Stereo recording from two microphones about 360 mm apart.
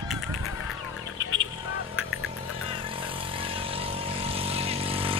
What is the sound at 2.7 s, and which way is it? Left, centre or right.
Vehicle, centre.